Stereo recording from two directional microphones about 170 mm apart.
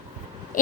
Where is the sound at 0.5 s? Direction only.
50° left (ahead or behind).